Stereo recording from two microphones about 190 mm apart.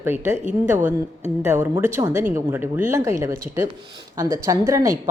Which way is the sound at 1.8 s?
15° right (ahead or behind).